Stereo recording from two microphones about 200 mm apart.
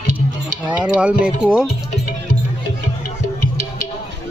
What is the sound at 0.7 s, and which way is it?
Speech, 5° right (ahead or behind).